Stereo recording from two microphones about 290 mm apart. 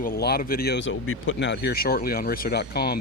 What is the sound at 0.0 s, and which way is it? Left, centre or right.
Speech, left.